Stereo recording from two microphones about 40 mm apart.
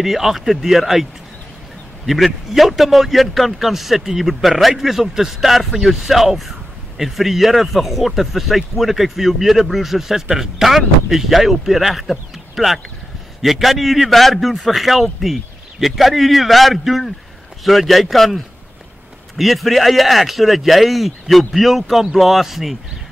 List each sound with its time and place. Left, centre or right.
0.0 s speech: centre
2.0 s a man's voice: centre